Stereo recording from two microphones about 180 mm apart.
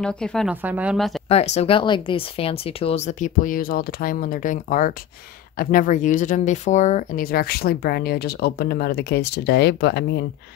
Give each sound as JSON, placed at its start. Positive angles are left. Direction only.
{"t": 0.0, "sound": "speech", "side_deg": 5}
{"t": 0.6, "sound": "speech", "side_deg": -10}
{"t": 1.3, "sound": "speech", "side_deg": 35}